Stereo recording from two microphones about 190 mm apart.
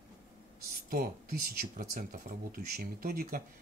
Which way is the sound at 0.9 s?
50° right (ahead or behind).